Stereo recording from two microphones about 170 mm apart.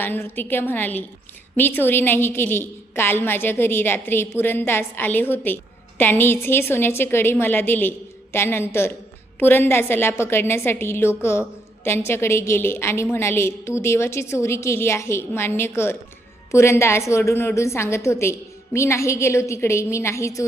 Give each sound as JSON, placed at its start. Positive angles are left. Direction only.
{"t": 0.0, "sound": "a woman's voice", "side_deg": 10}